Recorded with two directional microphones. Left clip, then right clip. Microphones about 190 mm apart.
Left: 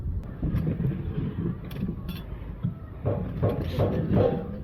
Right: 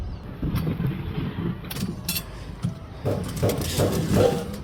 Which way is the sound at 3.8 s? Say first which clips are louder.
Right 4 dB; 75° right (ahead or behind).